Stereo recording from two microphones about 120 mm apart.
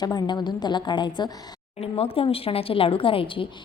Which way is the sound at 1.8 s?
55° left (ahead or behind).